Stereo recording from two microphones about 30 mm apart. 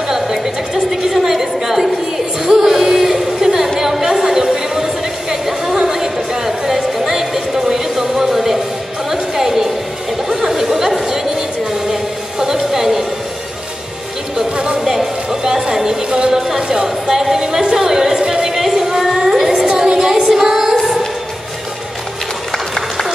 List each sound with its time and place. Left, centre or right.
1.0 s a sound: centre
9.1 s music: centre
10.2 s chatter: centre
11.9 s music: centre
15.4 s music: centre
16.3 s a sound: centre
18.2 s music: centre
19.5 s music: right